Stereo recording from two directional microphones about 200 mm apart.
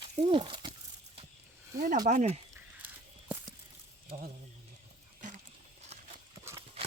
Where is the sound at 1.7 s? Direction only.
15° right (ahead or behind).